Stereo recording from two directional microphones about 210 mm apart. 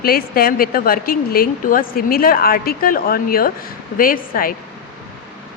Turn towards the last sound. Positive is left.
turn(degrees=45)  # may be behind; listen again after turning